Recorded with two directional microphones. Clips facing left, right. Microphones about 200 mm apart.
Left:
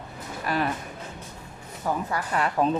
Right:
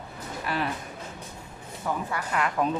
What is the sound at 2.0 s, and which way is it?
Speech, 35° left (ahead or behind).